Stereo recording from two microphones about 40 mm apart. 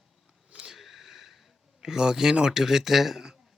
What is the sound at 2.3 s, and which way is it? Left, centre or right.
Speech, centre.